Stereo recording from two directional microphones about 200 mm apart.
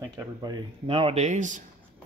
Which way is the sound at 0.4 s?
25° right (ahead or behind).